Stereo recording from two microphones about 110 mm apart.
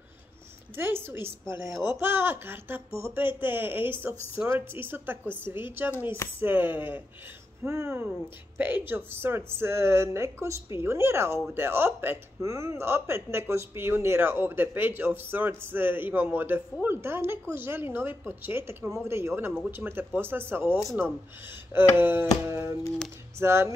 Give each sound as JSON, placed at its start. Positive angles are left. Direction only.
{"t": 0.7, "sound": "speech", "side_deg": -20}